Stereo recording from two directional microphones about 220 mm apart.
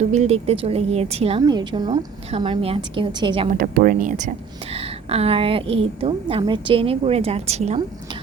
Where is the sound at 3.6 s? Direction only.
40° right (ahead or behind).